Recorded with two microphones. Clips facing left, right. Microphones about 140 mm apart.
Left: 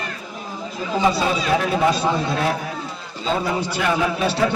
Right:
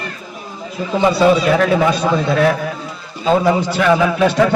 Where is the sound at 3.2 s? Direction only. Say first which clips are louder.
Right 8 dB; 65° right (ahead or behind); by 4.2 s 90° right.